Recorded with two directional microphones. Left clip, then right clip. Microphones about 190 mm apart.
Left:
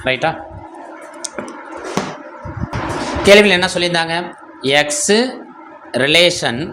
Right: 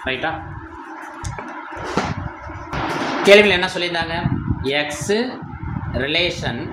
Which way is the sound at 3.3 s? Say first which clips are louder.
Left 3 dB; 35° left (ahead or behind).